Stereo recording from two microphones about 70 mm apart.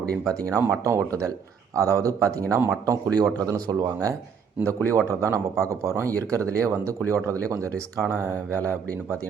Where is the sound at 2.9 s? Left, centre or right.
Right.